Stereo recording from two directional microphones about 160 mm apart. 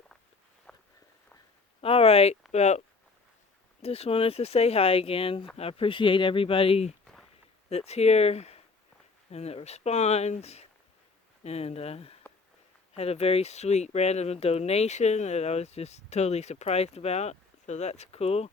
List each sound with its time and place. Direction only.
0.7 s walk: 5° left (ahead or behind)
1.8 s speech: 35° left (ahead or behind)